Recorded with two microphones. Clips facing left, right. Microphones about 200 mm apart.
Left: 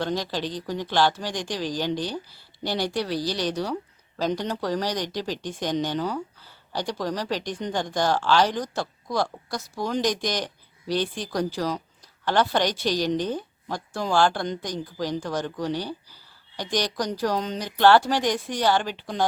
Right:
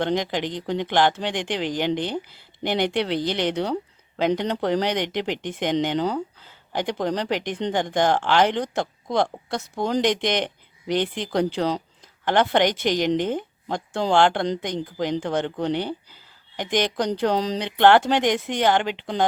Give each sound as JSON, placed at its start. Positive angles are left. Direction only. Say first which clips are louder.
{"t": 0.0, "sound": "speech", "louder": "right 4 dB", "side_deg": -20}
{"t": 4.7, "sound": "speech", "louder": "right 4 dB", "side_deg": -65}
{"t": 4.9, "sound": "speech", "louder": "right 4 dB", "side_deg": -20}